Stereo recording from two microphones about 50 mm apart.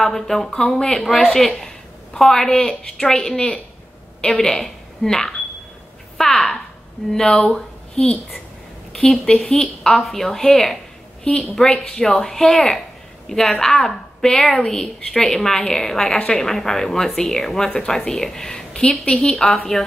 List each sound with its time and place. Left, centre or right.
0.0 s a woman's voice: centre
1.0 s a woman's voice: centre; by 8.1 s left
9.2 s a woman's voice: centre
11.2 s a woman's voice: left
12.0 s a woman's voice: centre